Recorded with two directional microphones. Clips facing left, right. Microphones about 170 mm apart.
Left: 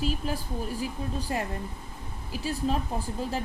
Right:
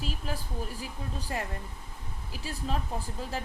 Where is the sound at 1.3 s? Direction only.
25° left (ahead or behind).